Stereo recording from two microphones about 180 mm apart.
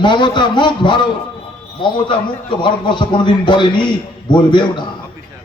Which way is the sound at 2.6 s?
25° left (ahead or behind).